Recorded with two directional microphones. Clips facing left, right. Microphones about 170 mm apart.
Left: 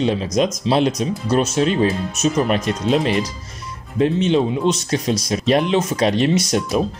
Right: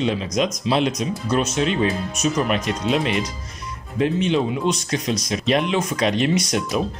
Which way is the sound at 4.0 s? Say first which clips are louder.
Left 3 dB; 30° left (ahead or behind).